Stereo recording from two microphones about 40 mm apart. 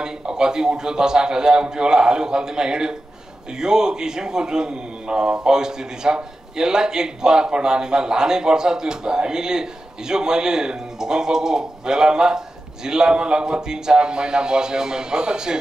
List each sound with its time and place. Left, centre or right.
0.0 s a man's voice: centre